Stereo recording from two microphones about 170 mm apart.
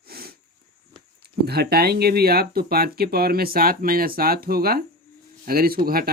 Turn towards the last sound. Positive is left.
turn(degrees=-60)  # may be behind; listen again after turning